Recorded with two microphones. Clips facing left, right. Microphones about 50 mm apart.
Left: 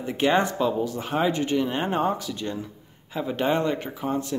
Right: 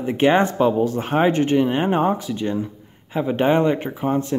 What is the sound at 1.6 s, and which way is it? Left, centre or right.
Speech, right.